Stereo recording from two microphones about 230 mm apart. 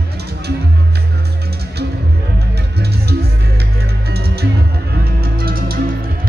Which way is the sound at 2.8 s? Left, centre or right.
Right.